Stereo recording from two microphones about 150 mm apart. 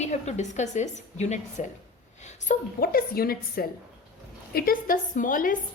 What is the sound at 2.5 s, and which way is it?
A woman's voice, 80° left.